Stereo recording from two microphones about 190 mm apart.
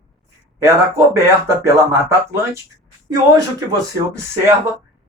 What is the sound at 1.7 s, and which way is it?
Speech, 15° right (ahead or behind).